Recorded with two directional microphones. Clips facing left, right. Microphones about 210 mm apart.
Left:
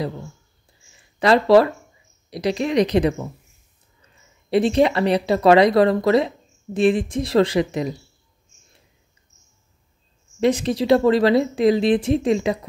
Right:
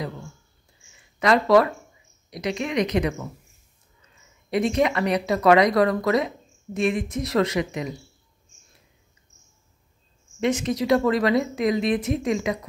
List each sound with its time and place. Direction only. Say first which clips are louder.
1.2 s speech: left 4 dB; 30° left (ahead or behind)
4.5 s speech: left 5 dB; 30° left (ahead or behind)
10.4 s speech: left 4 dB; 35° left (ahead or behind)